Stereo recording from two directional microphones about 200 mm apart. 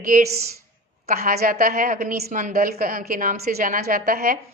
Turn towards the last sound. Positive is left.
turn(degrees=-50)  # may be behind; listen again after turning